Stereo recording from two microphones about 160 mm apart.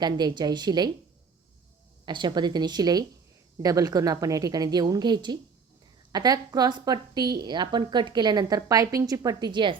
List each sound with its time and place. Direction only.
0.0 s a woman's voice: 25° right (ahead or behind)
2.0 s a woman's voice: 25° right (ahead or behind)